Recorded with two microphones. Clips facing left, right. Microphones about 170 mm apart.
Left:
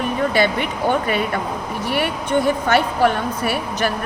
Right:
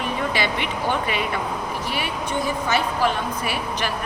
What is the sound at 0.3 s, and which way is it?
Speech, 45° left (ahead or behind).